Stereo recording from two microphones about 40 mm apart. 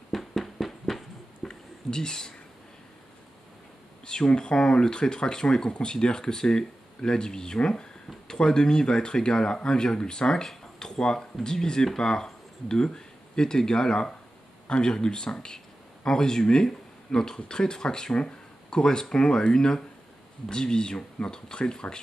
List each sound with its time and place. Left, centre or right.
0.1 s a sound: centre
1.5 s whispering: centre
4.0 s a man's voice: centre